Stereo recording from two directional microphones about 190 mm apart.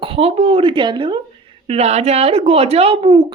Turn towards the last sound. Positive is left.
turn(degrees=-25)  # may be behind; listen again after turning